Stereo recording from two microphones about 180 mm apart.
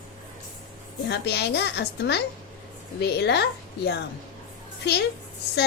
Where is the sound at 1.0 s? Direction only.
65° left (ahead or behind).